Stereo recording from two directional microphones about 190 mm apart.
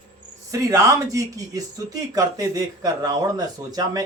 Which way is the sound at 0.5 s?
15° right (ahead or behind).